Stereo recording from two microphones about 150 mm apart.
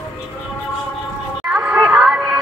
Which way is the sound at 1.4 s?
5° right (ahead or behind).